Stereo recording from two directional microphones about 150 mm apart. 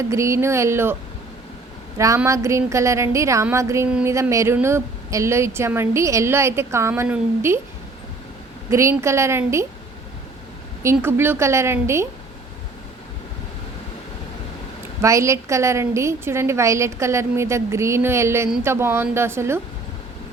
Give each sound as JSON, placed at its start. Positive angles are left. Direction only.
{"t": 0.1, "sound": "a woman's voice", "side_deg": -20}
{"t": 2.0, "sound": "a woman's voice", "side_deg": -20}
{"t": 8.7, "sound": "a woman's voice", "side_deg": -20}
{"t": 11.0, "sound": "a woman's voice", "side_deg": -15}
{"t": 15.0, "sound": "a woman's voice", "side_deg": -20}